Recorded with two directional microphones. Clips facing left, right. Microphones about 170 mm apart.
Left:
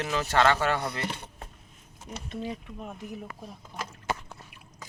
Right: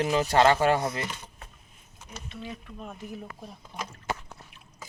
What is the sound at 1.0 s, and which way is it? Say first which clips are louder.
Speech: left 3 dB; 60° left (ahead or behind).